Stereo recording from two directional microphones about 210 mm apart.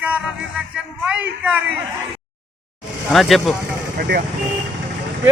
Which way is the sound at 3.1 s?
Centre (ahead or behind).